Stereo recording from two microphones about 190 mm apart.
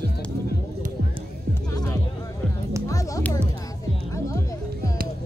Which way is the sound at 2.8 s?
15° left (ahead or behind).